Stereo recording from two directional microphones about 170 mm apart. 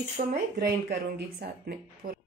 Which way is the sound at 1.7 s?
60° right (ahead or behind).